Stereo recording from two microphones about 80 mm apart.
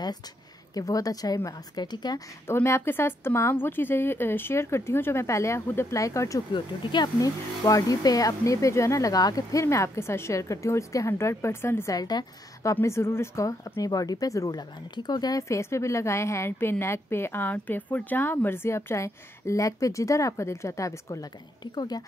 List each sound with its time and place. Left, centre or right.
0.7 s speech: left
2.4 s a woman's voice: left
6.5 s speech: left
7.2 s a woman's voice: left
11.9 s a woman's voice: left
12.8 s speech: left
15.4 s a woman's voice: left
21.7 s a woman's voice: left